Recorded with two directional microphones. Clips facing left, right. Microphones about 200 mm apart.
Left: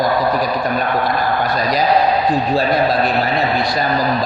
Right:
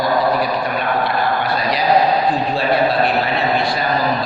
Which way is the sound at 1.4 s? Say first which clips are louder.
Left 1 dB; 45° left (ahead or behind).